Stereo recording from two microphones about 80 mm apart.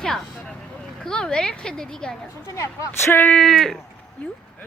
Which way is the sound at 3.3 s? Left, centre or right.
Centre.